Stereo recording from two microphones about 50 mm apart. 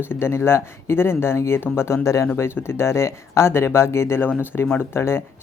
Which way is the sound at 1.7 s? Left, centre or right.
Left.